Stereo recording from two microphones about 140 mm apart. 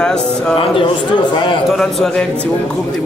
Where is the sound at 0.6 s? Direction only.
35° left (ahead or behind).